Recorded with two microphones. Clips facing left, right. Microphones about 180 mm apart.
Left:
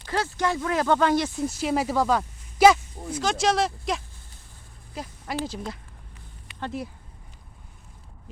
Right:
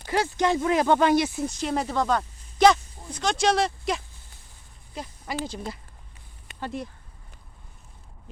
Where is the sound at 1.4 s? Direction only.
5° left (ahead or behind).